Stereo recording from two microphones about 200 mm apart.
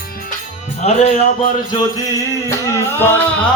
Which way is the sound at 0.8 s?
30° left (ahead or behind).